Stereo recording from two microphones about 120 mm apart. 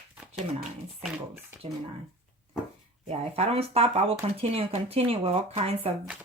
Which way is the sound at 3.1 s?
55° right (ahead or behind).